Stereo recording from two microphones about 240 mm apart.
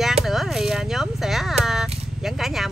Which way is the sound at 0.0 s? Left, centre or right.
Centre.